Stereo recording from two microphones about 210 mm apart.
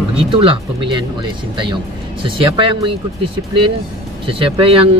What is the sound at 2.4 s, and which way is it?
Speech, 25° right (ahead or behind).